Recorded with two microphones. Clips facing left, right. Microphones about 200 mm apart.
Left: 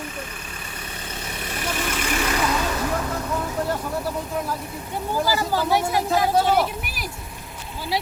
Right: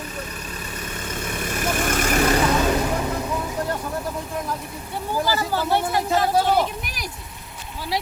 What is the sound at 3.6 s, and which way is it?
Speech, 5° left (ahead or behind).